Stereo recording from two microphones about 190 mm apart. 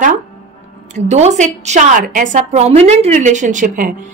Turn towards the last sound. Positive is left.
turn(degrees=-40)  # may be behind; listen again after turning